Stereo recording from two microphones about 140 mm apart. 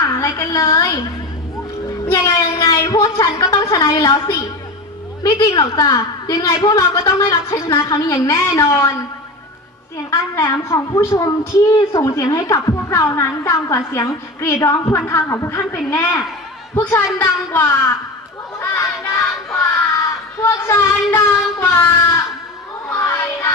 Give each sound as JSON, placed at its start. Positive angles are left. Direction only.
{"t": 0.0, "sound": "a woman's voice", "side_deg": 20}
{"t": 2.1, "sound": "a woman's voice", "side_deg": 25}
{"t": 10.1, "sound": "a woman's voice", "side_deg": 20}
{"t": 18.6, "sound": "a sound", "side_deg": 15}
{"t": 20.4, "sound": "speech", "side_deg": 20}
{"t": 22.9, "sound": "child singing", "side_deg": 20}